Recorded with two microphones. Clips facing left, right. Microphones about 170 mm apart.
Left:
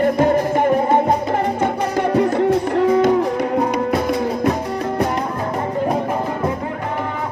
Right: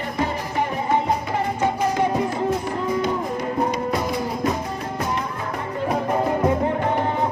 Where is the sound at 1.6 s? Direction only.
65° left (ahead or behind).